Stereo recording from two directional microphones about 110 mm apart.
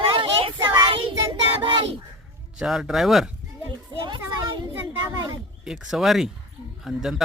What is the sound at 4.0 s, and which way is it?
Children playing, 45° right (ahead or behind).